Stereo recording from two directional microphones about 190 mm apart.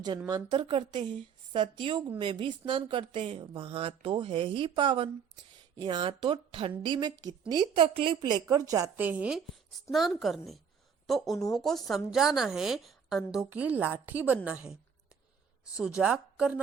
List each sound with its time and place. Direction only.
0.3 s a woman's voice: 25° right (ahead or behind); by 14.8 s 5° right (ahead or behind)
16.0 s a woman's voice: 5° right (ahead or behind)